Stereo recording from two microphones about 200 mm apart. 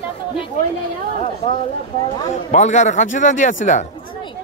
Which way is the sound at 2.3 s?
40° left (ahead or behind).